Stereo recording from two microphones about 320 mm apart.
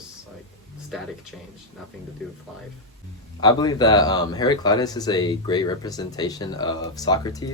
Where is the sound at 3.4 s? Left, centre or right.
Centre.